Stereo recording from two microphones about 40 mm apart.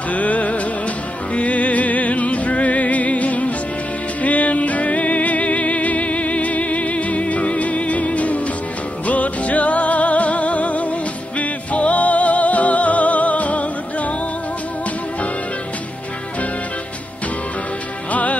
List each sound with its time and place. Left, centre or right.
0.1 s music: left
18.1 s music: left